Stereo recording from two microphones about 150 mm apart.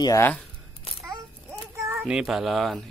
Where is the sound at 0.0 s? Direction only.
20° left (ahead or behind).